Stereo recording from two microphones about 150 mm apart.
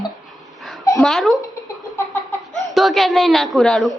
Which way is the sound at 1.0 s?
Centre (ahead or behind).